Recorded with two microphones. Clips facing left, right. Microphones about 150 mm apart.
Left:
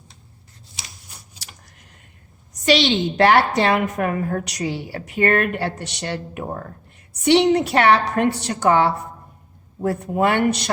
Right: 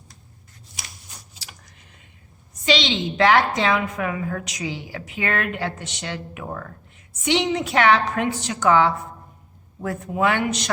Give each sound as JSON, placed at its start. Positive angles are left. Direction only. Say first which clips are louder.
{"t": 2.5, "sound": "a woman's voice", "louder": "left 4 dB", "side_deg": 60}
{"t": 4.5, "sound": "a woman's voice", "louder": "left 4 dB", "side_deg": 65}
{"t": 6.4, "sound": "speech", "louder": "left 3 dB", "side_deg": 35}
{"t": 7.6, "sound": "a woman's voice", "louder": "left 2 dB", "side_deg": 65}
{"t": 9.8, "sound": "speech", "louder": "left 6 dB", "side_deg": 35}
{"t": 10.1, "sound": "a man's voice", "louder": "left 2 dB", "side_deg": 55}